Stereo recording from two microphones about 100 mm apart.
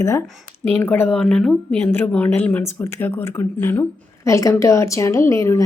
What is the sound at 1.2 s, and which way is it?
A woman's voice, 5° left (ahead or behind).